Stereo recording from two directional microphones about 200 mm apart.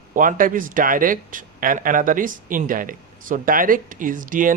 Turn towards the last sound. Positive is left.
turn(degrees=-40)  # may be behind; listen again after turning